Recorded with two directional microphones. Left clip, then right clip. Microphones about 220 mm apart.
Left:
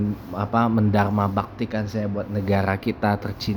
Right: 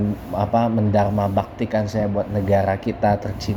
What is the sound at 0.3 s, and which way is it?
Speech, 15° left (ahead or behind).